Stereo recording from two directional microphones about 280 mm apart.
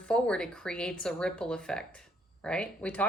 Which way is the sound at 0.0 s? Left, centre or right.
Centre.